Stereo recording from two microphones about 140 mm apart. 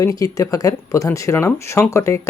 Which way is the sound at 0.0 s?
25° left (ahead or behind).